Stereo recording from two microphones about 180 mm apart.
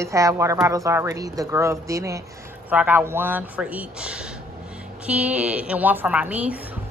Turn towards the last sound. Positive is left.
turn(degrees=-10)  # may be behind; listen again after turning